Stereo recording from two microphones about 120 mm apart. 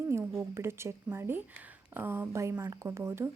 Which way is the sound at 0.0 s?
20° right (ahead or behind).